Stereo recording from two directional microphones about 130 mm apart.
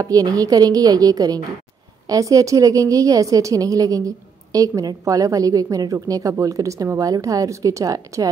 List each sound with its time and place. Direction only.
0.0 s a woman's voice: 30° right (ahead or behind)